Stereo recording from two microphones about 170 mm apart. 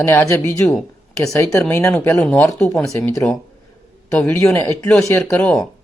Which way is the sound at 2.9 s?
15° left (ahead or behind).